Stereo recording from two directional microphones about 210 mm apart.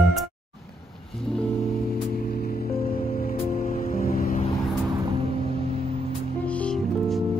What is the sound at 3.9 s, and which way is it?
Music, 45° left (ahead or behind).